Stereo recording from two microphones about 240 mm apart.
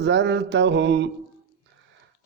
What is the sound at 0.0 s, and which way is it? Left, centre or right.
Mantra, right.